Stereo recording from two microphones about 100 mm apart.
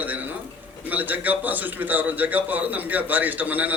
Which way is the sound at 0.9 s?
15° right (ahead or behind).